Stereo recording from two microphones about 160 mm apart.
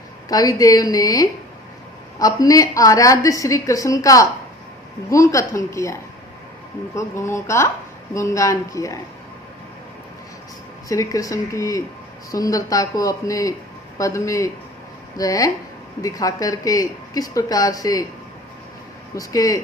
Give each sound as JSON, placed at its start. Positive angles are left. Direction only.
{"t": 0.3, "sound": "a woman's voice", "side_deg": 20}
{"t": 10.8, "sound": "a woman's voice", "side_deg": 20}
{"t": 19.1, "sound": "a woman's voice", "side_deg": 20}